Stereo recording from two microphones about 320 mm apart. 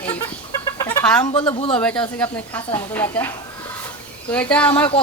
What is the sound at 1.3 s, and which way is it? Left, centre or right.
Speech, centre.